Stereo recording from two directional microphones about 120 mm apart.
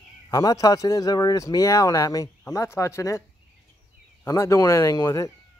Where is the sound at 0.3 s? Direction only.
30° left (ahead or behind).